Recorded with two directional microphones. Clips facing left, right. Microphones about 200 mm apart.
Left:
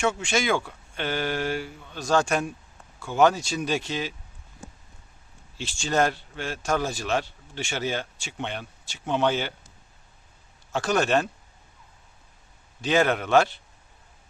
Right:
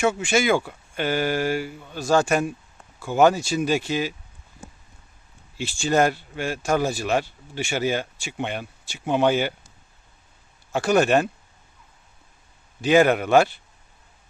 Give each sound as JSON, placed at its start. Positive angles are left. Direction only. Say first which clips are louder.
{"t": 0.0, "sound": "speech", "louder": "right 4 dB", "side_deg": -5}
{"t": 5.5, "sound": "speech", "louder": "right 4 dB", "side_deg": -10}
{"t": 10.7, "sound": "speech", "louder": "right 4 dB", "side_deg": -10}
{"t": 12.8, "sound": "speech", "louder": "right 5 dB", "side_deg": -10}